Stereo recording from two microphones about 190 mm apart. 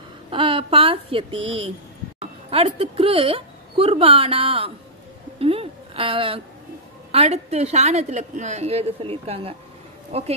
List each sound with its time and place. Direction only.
0.3 s a woman's voice: 25° right (ahead or behind)
5.4 s a sound: 30° right (ahead or behind)
7.1 s a woman's voice: 35° right (ahead or behind)